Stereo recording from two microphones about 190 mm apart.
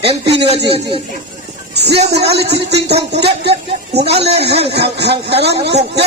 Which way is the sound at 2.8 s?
60° right (ahead or behind).